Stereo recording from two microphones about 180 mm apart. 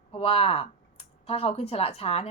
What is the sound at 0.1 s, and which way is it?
Speech, 35° left (ahead or behind).